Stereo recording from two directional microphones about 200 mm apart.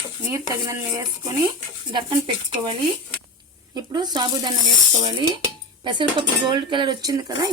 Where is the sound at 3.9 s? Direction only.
20° right (ahead or behind).